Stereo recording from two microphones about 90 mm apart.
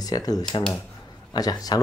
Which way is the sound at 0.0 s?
45° left (ahead or behind).